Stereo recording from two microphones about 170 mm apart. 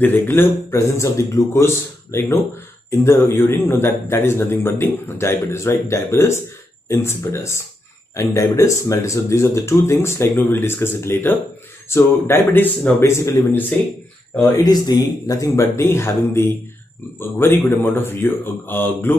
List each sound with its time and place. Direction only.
0.0 s a man's voice: 10° left (ahead or behind)
14.6 s a man's voice: 20° left (ahead or behind)